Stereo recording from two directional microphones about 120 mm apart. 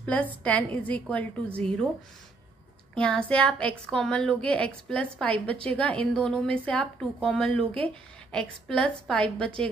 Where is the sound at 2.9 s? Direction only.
10° left (ahead or behind).